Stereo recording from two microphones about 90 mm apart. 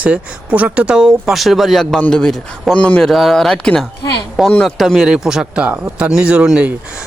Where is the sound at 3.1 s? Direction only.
Centre (ahead or behind).